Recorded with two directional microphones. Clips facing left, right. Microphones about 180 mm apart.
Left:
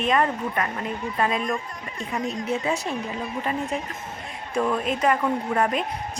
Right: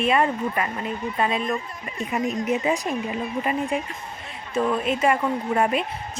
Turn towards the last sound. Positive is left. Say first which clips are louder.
# right 1 dB
turn(degrees=-5)  # may be behind; listen again after turning